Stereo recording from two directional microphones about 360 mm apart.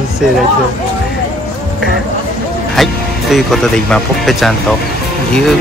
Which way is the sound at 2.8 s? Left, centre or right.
Centre.